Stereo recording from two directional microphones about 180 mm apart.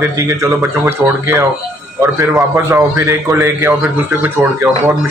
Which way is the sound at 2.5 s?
15° right (ahead or behind).